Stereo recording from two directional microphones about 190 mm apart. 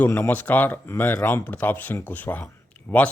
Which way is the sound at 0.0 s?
10° left (ahead or behind).